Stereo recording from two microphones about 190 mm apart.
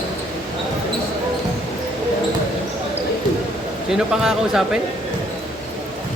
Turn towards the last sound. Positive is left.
turn(degrees=0)  # may be behind; listen again after turning